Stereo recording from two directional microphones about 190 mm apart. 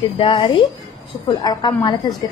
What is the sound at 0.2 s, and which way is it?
A woman's voice, 25° left (ahead or behind).